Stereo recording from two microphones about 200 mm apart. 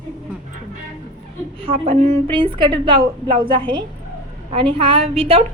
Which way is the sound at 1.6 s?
30° right (ahead or behind).